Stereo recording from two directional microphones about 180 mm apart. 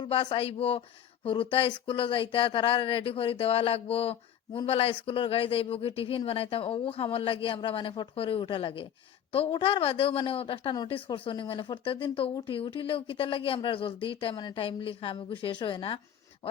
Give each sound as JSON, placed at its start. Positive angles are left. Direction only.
{"t": 0.0, "sound": "a woman's voice", "side_deg": 25}